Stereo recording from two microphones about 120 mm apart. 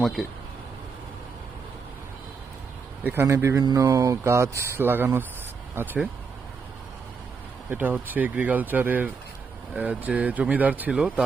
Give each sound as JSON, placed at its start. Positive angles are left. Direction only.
{"t": 0.0, "sound": "speech", "side_deg": 0}
{"t": 3.0, "sound": "speech", "side_deg": -15}
{"t": 7.7, "sound": "speech", "side_deg": -15}